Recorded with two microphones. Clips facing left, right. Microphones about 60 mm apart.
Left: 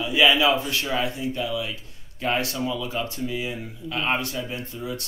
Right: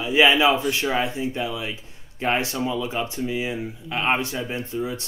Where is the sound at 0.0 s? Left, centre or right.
Right.